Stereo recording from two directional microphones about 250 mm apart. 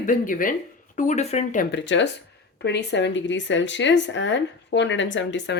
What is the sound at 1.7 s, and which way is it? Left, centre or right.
Speech, left.